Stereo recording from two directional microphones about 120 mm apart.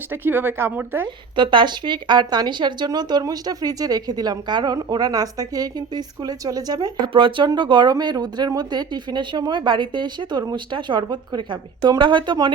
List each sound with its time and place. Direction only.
0.1 s speech: 15° right (ahead or behind)
1.0 s a woman's voice: 40° right (ahead or behind)
7.1 s a woman's voice: 45° right (ahead or behind)